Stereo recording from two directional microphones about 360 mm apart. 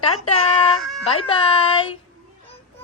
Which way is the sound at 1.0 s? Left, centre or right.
Centre.